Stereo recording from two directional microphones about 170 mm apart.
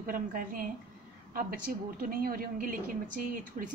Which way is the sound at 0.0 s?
55° right (ahead or behind).